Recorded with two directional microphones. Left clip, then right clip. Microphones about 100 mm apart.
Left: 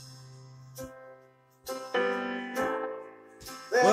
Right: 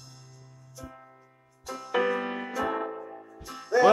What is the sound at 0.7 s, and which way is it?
Music, 30° right (ahead or behind).